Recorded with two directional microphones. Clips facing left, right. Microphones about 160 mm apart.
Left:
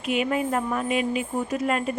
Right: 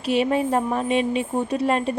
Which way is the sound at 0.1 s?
30° right (ahead or behind).